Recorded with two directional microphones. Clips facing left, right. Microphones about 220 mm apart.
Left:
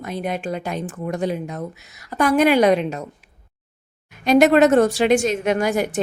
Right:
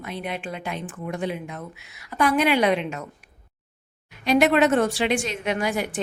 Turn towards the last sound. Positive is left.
turn(degrees=45)  # may be behind; listen again after turning